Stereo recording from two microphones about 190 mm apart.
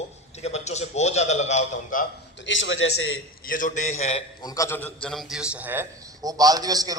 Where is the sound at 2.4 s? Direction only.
80° left.